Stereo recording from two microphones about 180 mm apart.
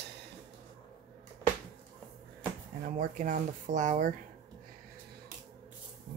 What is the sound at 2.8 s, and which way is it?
Speech, 45° right (ahead or behind).